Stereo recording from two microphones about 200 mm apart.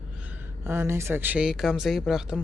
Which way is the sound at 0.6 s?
10° right (ahead or behind).